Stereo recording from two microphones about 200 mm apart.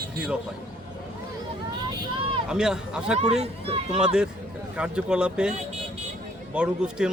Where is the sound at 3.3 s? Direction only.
30° right (ahead or behind).